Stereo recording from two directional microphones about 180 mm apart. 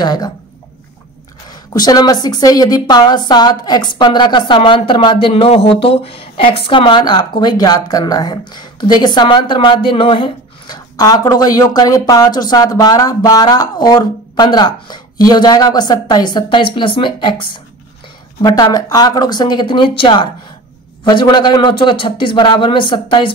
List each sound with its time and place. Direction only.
0.0 s a woman's voice: 20° left (ahead or behind)
1.7 s a woman's voice: 20° left (ahead or behind)